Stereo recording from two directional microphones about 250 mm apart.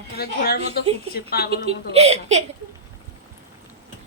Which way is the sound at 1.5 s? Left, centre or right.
Right.